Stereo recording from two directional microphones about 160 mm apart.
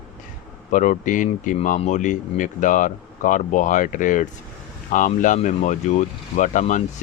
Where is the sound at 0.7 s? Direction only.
55° left (ahead or behind).